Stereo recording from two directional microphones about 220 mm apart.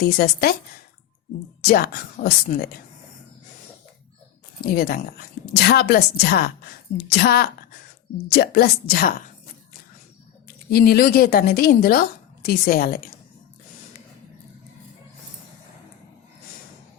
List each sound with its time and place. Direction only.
0.0 s a woman's voice: 45° left (ahead or behind)
1.6 s a woman's voice: 45° left (ahead or behind)
4.6 s a woman's voice: 45° left (ahead or behind)
10.7 s a woman's voice: 45° left (ahead or behind)